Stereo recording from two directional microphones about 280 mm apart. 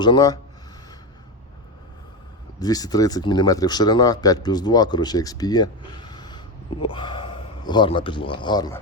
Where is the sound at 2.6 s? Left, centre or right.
Centre.